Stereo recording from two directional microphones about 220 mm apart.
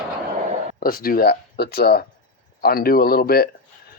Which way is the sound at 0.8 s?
40° left (ahead or behind).